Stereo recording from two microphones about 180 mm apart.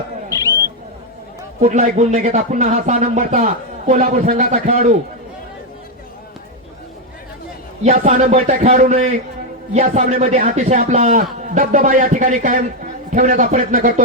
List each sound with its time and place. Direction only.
1.6 s speech: 40° right (ahead or behind)
7.9 s speech: 40° right (ahead or behind)